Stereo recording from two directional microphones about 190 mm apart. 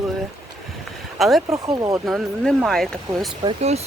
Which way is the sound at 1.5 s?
20° right (ahead or behind).